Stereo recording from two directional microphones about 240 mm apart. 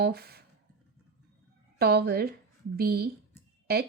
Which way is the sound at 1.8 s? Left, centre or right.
Right.